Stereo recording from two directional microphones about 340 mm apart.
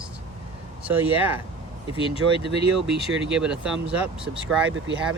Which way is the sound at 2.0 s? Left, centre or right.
Centre.